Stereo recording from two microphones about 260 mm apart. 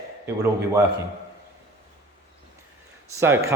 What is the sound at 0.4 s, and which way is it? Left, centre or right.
Speech, centre.